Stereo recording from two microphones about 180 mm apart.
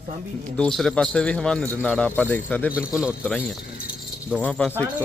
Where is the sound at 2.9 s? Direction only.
5° right (ahead or behind).